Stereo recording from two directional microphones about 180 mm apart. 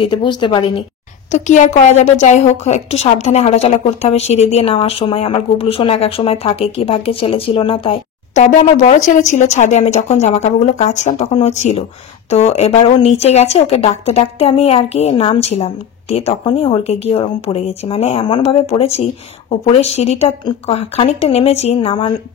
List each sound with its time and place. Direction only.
0.0 s a woman's voice: 25° left (ahead or behind)
1.3 s speech: 40° left (ahead or behind)